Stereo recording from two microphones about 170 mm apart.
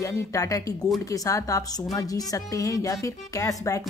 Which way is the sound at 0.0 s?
20° left (ahead or behind).